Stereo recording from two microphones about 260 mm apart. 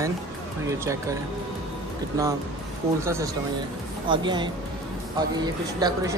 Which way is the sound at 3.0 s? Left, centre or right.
Centre.